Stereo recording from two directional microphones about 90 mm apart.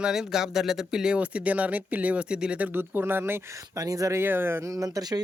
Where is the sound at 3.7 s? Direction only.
40° right (ahead or behind).